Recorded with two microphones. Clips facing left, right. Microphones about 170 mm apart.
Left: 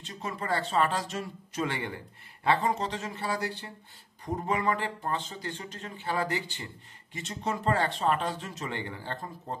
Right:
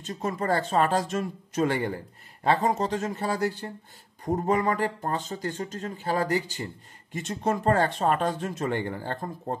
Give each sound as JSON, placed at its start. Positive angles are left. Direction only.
{"t": 0.0, "sound": "speech", "side_deg": -45}